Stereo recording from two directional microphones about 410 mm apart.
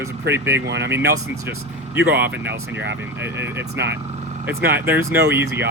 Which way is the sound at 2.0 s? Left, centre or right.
Centre.